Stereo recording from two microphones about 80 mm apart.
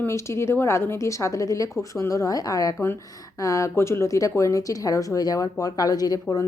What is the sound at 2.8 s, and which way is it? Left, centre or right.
Speech, left.